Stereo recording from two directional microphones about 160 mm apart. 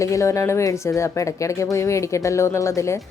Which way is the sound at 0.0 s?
20° left (ahead or behind).